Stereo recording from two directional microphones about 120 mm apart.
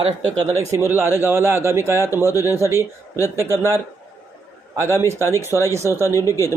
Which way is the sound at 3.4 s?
20° right (ahead or behind).